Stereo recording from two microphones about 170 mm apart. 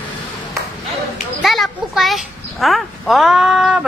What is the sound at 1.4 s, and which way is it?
A child's voice, centre (ahead or behind).